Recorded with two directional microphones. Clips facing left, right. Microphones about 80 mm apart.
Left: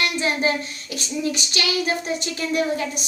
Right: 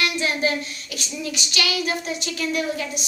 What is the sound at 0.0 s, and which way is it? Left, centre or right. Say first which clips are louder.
Child singing: left 1 dB; left.